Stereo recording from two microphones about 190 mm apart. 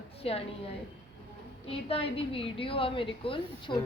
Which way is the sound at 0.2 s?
30° left (ahead or behind).